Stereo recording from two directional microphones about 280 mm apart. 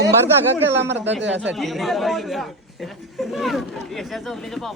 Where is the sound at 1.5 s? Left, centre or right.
Centre.